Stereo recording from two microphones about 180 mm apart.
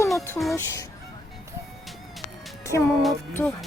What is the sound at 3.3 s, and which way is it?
Speech, 10° left (ahead or behind).